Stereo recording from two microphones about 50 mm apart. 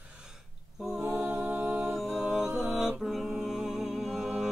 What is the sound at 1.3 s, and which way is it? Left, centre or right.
A capella, right.